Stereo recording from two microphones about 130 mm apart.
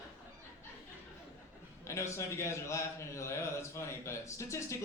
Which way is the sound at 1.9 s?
20° left (ahead or behind).